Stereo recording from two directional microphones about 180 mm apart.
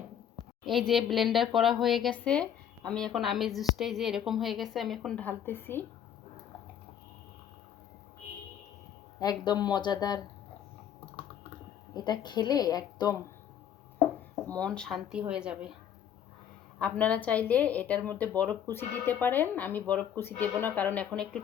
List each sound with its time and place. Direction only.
0.6 s a woman's voice: centre (ahead or behind)
9.1 s a woman's voice: 20° left (ahead or behind)
11.9 s a woman's voice: 25° left (ahead or behind)
14.4 s a woman's voice: 5° left (ahead or behind)
16.8 s a woman's voice: 5° left (ahead or behind)